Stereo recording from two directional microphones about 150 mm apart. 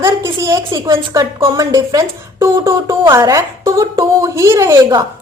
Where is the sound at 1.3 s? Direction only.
35° right (ahead or behind).